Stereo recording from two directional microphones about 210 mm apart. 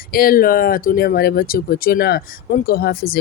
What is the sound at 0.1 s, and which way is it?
Speech, 45° left (ahead or behind).